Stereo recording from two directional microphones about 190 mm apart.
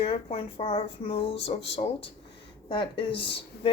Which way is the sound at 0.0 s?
30° left (ahead or behind).